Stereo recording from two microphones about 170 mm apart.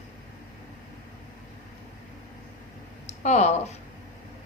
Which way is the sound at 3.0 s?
40° left (ahead or behind).